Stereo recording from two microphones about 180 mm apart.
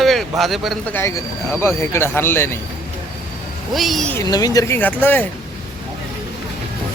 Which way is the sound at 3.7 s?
Centre (ahead or behind).